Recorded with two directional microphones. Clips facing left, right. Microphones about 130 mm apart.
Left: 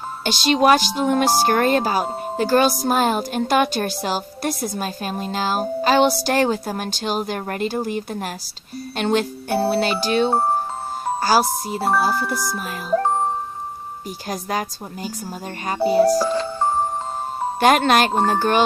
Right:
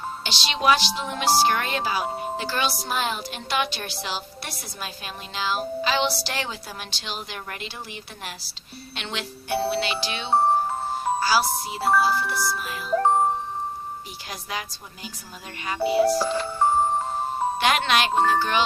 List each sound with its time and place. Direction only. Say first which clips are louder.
0.3 s a woman's voice: left 7 dB; 45° left (ahead or behind)
15.6 s speech: left 4 dB; 45° left (ahead or behind)
16.2 s music: left 3 dB; 15° left (ahead or behind)
17.6 s a woman's voice: left 8 dB; 45° left (ahead or behind)